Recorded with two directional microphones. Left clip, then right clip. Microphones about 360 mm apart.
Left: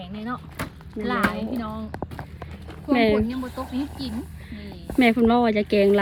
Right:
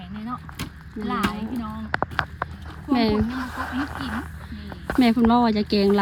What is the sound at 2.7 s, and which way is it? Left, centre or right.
Speech, centre.